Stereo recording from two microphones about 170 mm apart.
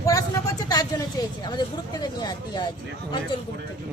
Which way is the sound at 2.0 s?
25° left (ahead or behind).